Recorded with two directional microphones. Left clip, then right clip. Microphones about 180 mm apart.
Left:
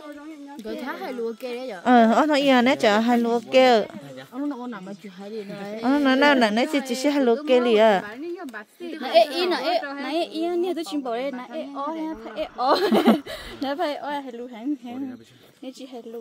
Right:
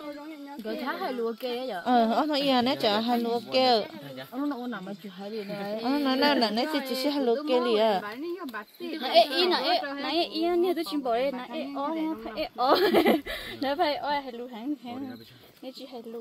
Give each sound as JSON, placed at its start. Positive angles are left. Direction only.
{"t": 0.7, "sound": "speech", "side_deg": 35}
{"t": 1.9, "sound": "speech", "side_deg": 65}
{"t": 4.4, "sound": "speech", "side_deg": 35}
{"t": 5.8, "sound": "speech", "side_deg": 65}
{"t": 9.0, "sound": "a woman's voice", "side_deg": 90}
{"t": 10.0, "sound": "a woman's voice", "side_deg": 75}
{"t": 13.6, "sound": "speech", "side_deg": 55}